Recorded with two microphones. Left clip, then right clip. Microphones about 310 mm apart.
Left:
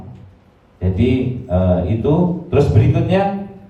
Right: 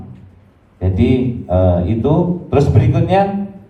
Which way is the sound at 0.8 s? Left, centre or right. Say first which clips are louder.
Right 2 dB; centre.